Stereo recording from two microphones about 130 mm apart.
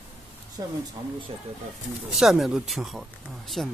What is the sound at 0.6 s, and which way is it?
Speech, 30° right (ahead or behind).